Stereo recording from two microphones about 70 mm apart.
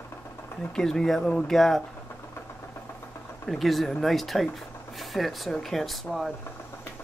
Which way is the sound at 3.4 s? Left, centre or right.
Centre.